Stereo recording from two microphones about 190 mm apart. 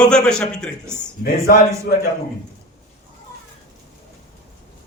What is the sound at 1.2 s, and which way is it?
Speech, 50° left (ahead or behind).